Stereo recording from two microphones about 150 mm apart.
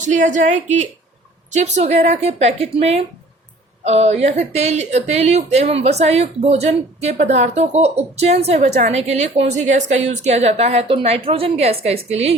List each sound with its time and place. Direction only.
0.0 s a woman's voice: 55° right (ahead or behind)